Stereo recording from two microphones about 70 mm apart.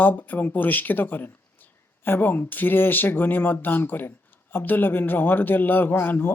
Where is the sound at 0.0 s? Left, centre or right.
Left.